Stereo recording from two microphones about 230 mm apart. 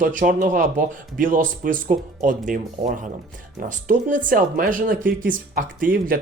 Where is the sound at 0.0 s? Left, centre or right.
Right.